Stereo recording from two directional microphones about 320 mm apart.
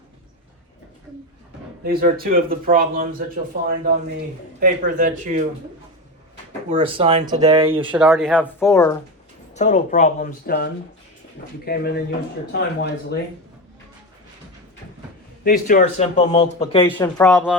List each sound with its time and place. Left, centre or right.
1.8 s speech: right
6.7 s speech: centre
7.9 s speech: centre
9.6 s speech: left
15.4 s speech: left
16.9 s speech: centre